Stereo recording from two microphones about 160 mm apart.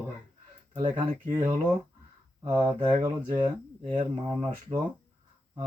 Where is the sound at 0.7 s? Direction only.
30° right (ahead or behind).